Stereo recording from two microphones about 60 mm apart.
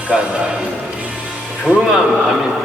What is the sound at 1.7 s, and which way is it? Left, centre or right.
Speech, centre.